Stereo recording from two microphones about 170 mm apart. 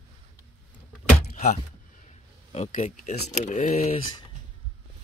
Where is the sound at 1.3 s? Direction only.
45° left (ahead or behind).